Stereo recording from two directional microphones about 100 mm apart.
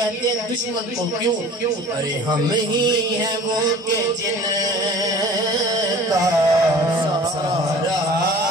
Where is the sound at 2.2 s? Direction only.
45° right (ahead or behind).